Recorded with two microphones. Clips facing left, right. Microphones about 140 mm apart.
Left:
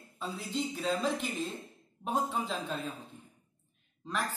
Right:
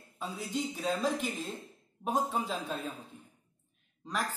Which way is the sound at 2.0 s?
10° right (ahead or behind).